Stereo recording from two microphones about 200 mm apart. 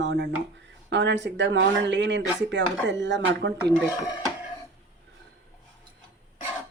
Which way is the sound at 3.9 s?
10° right (ahead or behind).